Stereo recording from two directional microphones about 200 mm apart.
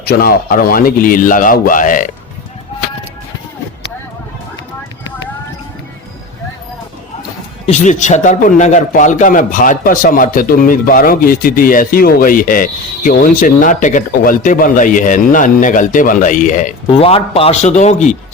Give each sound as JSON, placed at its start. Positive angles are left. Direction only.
{"t": 0.0, "sound": "a man's voice", "side_deg": 50}
{"t": 7.7, "sound": "a man's voice", "side_deg": 35}
{"t": 16.8, "sound": "a man's voice", "side_deg": 30}